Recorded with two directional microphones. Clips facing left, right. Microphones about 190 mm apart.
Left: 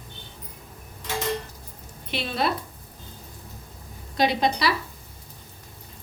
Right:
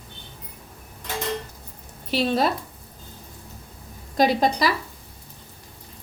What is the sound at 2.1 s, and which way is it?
Speech, 40° right (ahead or behind).